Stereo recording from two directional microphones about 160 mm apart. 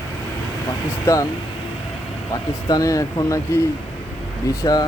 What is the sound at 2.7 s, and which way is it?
Speech, 20° left (ahead or behind).